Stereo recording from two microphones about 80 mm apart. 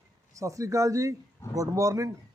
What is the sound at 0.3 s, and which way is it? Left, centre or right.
A man's voice, right.